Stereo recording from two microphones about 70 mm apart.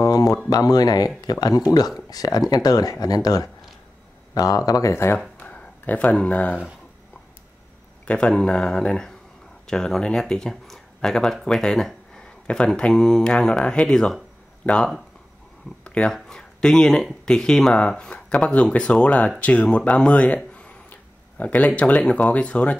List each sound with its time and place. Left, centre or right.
0.0 s a sound: left
0.5 s speech: left
4.9 s speech: left
5.4 s speech: left
8.1 s speech: centre
15.8 s a sound: centre
16.3 s speech: centre
20.5 s a sound: centre
22.1 s speech: centre